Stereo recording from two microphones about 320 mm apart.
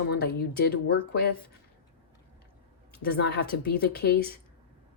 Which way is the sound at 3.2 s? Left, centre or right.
Left.